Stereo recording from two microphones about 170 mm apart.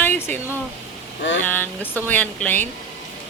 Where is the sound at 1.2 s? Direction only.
90° left.